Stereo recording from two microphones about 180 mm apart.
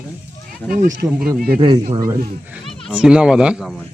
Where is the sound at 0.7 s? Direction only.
50° right (ahead or behind).